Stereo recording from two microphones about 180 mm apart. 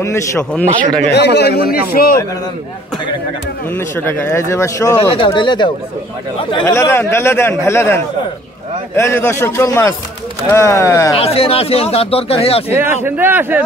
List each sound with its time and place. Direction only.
0.0 s a man's voice: 15° left (ahead or behind)
1.1 s a man's voice: 70° left (ahead or behind)
3.7 s a man's voice: 10° left (ahead or behind)
5.1 s speech: 25° left (ahead or behind)
6.6 s a man's voice: 15° left (ahead or behind)
11.1 s speech: 30° left (ahead or behind)
12.7 s a man's voice: 10° right (ahead or behind)